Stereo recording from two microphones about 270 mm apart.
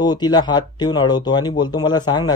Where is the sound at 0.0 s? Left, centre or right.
Centre.